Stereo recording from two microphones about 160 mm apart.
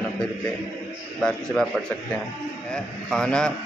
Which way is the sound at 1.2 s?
5° left (ahead or behind).